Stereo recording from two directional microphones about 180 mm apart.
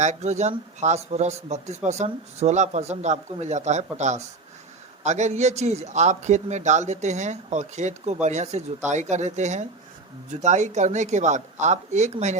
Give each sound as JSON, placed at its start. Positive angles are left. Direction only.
{"t": 0.0, "sound": "speech", "side_deg": -40}